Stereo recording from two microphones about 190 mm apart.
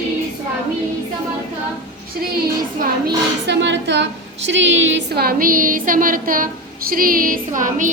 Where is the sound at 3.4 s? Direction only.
70° right (ahead or behind); by 6.5 s 45° right (ahead or behind).